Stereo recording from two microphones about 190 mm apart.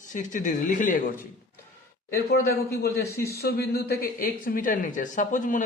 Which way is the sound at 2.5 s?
55° left (ahead or behind).